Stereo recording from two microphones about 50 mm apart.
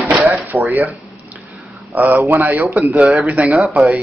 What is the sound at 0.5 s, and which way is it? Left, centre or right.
Speech, centre.